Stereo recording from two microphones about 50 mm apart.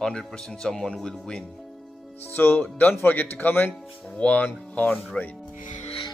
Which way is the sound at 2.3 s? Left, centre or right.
Left.